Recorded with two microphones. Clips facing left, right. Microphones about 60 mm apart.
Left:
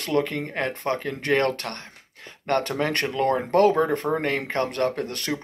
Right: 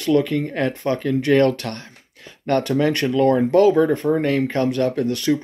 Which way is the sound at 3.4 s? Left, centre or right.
Left.